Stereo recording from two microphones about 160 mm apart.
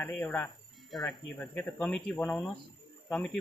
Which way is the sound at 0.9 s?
Centre (ahead or behind).